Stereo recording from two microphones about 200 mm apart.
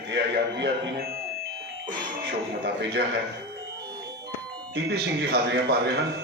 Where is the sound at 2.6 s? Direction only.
60° right (ahead or behind).